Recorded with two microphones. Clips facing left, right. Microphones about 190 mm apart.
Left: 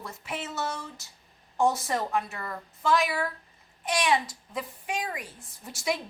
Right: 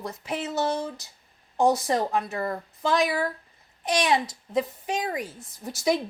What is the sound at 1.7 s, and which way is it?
Speech, 15° right (ahead or behind).